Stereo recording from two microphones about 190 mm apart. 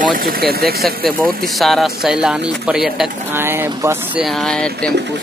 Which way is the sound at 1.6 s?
Centre (ahead or behind).